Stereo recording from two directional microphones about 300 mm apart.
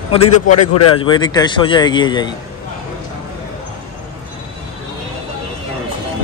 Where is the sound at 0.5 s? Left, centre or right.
Left.